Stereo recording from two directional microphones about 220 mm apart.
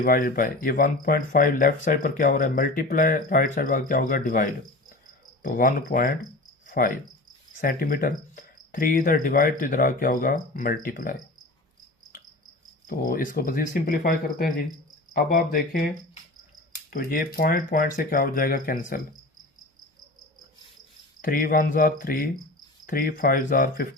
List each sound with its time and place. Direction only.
0.0 s speech: 40° left (ahead or behind)
6.7 s cricket: 40° left (ahead or behind)
7.6 s speech: 40° left (ahead or behind)
12.9 s speech: 40° left (ahead or behind)
21.2 s speech: 40° left (ahead or behind)